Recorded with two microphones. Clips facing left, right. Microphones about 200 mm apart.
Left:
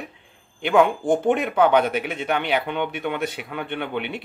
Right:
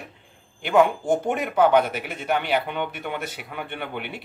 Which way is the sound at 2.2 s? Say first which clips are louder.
Right 2 dB; 5° right (ahead or behind).